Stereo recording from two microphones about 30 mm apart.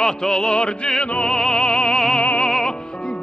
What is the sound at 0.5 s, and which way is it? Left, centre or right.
Music, left.